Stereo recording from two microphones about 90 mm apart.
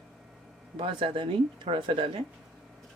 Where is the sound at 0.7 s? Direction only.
70° right (ahead or behind).